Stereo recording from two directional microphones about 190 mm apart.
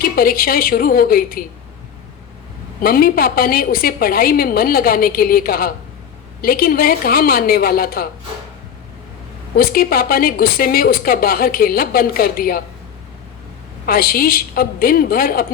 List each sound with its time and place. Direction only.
0.0 s speech: 50° left (ahead or behind)
2.8 s speech: 50° left (ahead or behind)
9.6 s speech: 50° left (ahead or behind)
13.8 s speech: 50° left (ahead or behind)